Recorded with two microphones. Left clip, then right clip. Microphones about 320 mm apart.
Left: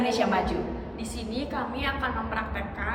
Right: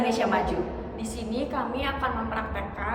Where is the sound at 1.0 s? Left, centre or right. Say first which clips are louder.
Right 5 dB; centre.